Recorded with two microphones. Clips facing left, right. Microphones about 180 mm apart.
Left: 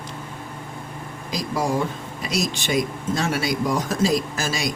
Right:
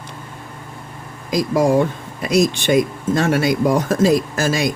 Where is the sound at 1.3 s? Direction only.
60° right (ahead or behind).